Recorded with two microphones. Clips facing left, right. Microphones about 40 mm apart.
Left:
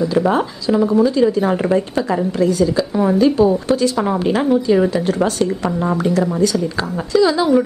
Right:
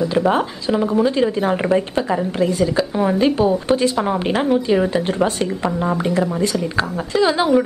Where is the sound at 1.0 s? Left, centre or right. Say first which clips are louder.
Left 3 dB; right.